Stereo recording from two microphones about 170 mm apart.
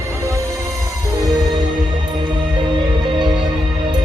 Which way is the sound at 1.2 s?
Centre (ahead or behind).